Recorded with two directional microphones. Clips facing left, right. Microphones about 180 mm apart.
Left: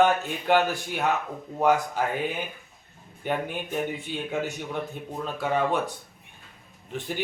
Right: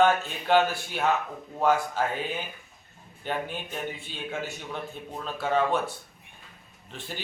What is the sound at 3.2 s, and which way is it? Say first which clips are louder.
Speech: left 3 dB; 15° left (ahead or behind).